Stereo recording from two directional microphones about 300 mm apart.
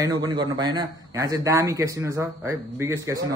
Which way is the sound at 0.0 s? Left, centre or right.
Centre.